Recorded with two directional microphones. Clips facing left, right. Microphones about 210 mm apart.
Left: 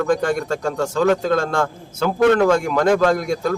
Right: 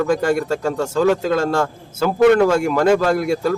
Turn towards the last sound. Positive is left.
turn(degrees=-5)  # may be behind; listen again after turning